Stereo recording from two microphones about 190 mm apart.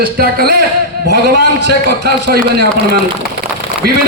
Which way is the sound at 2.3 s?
55° right (ahead or behind).